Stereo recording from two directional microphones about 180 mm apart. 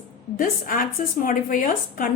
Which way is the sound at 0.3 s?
50° left (ahead or behind).